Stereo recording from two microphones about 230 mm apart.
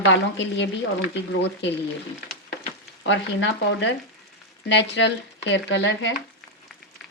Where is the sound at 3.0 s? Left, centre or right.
Left.